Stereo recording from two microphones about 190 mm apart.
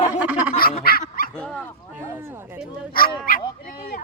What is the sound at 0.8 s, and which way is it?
Dog, 50° left (ahead or behind).